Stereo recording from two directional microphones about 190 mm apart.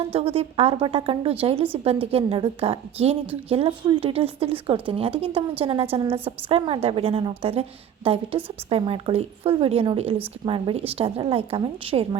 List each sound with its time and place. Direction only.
0.0 s a woman's voice: 30° right (ahead or behind)